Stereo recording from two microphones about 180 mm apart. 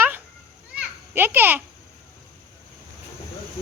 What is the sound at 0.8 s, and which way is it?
Children playing, 10° right (ahead or behind).